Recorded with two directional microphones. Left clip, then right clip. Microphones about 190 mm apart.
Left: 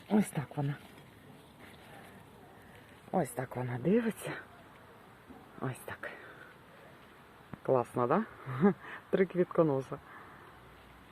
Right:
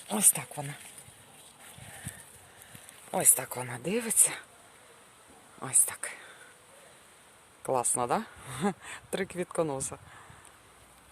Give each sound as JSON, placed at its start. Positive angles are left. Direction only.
{"t": 0.1, "sound": "speech", "side_deg": -30}
{"t": 3.1, "sound": "speech", "side_deg": -40}
{"t": 5.5, "sound": "speech", "side_deg": -25}
{"t": 7.6, "sound": "speech", "side_deg": -30}